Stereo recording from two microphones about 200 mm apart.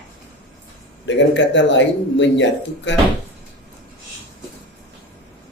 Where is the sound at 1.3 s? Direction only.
65° left (ahead or behind).